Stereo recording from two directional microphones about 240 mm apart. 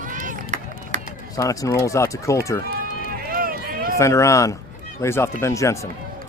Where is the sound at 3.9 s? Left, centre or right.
Centre.